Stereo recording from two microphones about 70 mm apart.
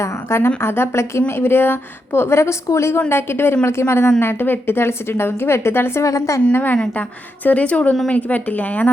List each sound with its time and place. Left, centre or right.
0.0 s a woman's voice: left
6.5 s speech: left